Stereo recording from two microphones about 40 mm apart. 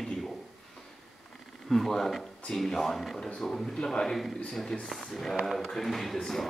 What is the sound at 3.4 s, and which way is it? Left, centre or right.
Speech, centre.